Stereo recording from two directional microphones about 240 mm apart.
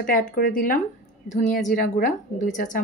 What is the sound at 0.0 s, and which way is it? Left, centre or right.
A woman's voice, left.